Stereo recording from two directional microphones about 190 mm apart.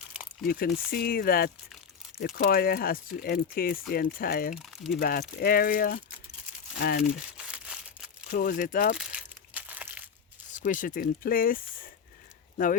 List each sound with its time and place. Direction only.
0.4 s speech: 50° left (ahead or behind)
4.5 s speech: centre (ahead or behind)
4.9 s speech: 50° left (ahead or behind)
7.0 s crumpling: 5° right (ahead or behind)
8.3 s speech: 50° left (ahead or behind)
9.0 s crumpling: 5° right (ahead or behind)
10.5 s speech: 45° left (ahead or behind)